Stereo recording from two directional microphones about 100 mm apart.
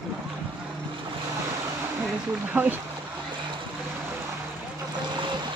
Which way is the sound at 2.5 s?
15° right (ahead or behind).